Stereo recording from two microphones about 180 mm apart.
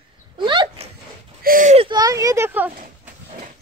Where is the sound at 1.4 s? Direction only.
45° right (ahead or behind).